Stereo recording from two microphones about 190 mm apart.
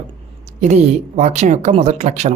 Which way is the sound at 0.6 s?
35° right (ahead or behind).